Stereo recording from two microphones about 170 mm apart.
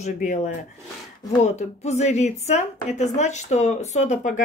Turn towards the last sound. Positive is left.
turn(degrees=45)  # may be behind; listen again after turning